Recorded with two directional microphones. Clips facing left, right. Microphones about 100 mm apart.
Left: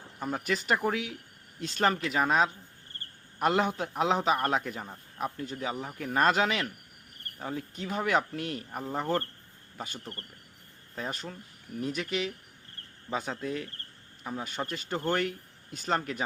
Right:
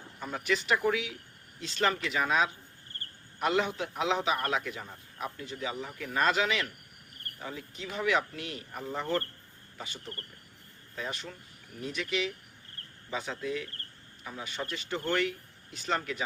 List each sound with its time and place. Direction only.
0.2 s a man's voice: 40° left (ahead or behind)